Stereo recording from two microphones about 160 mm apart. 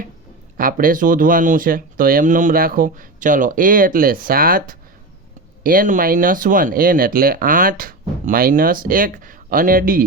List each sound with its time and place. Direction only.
0.5 s speech: 60° right (ahead or behind)